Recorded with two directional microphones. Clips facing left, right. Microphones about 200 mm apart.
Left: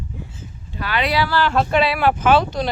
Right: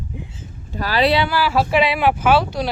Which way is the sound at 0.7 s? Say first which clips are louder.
Right 4 dB; 40° right (ahead or behind).